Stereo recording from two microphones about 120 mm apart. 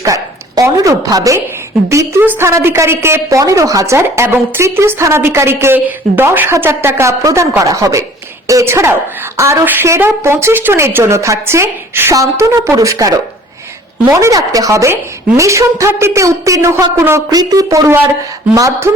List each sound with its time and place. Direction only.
0.0 s bow-wow: 30° right (ahead or behind)
1.9 s a woman's voice: 25° right (ahead or behind)